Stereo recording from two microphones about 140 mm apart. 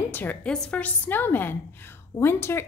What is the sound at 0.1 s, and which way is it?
A woman's voice, 15° left (ahead or behind).